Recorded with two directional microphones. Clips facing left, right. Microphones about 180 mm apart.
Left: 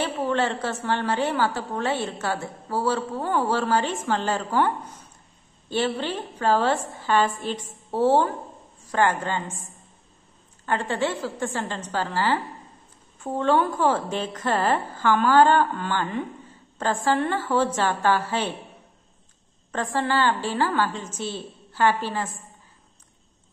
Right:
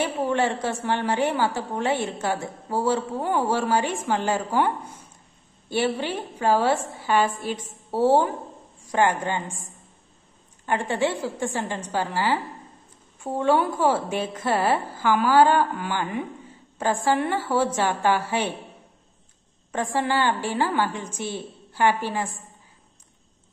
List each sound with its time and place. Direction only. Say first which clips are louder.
0.0 s a woman's voice: right 1 dB; 15° right (ahead or behind)
10.6 s a woman's voice: right 1 dB; 15° right (ahead or behind)
19.7 s a woman's voice: even; 15° right (ahead or behind)